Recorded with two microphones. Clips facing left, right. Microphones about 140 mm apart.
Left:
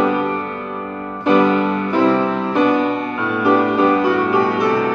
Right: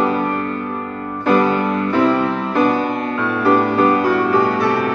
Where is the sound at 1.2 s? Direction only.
20° left (ahead or behind).